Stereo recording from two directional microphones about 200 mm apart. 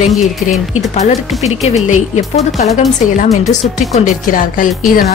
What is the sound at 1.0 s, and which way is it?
Speech, 35° left (ahead or behind).